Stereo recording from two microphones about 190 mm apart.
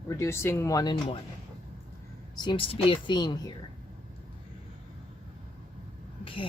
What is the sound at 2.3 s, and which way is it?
Speech, 25° left (ahead or behind).